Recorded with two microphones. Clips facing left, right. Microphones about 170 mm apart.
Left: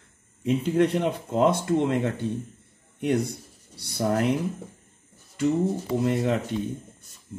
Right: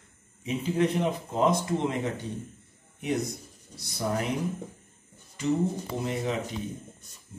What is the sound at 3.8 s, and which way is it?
Speech, 55° left (ahead or behind).